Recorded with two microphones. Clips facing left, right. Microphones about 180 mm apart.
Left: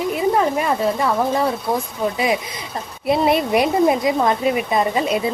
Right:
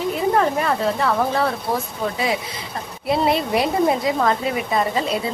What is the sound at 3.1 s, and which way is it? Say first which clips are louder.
A woman's voice: left 3 dB; 20° left (ahead or behind).